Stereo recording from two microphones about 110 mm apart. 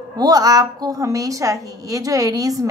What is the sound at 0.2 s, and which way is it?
A woman's voice, 35° right (ahead or behind).